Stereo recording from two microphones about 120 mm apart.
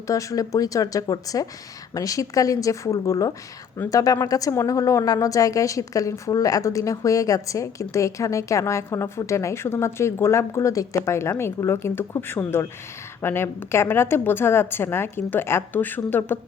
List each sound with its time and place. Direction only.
0.1 s speech: 25° left (ahead or behind)